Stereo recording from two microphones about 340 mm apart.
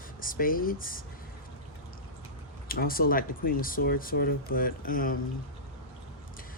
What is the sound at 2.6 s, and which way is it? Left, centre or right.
Speech, left.